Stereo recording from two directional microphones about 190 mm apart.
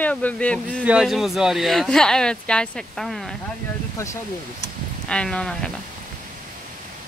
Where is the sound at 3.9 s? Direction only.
15° left (ahead or behind).